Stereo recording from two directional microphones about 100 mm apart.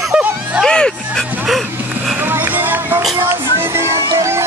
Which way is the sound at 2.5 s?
20° right (ahead or behind).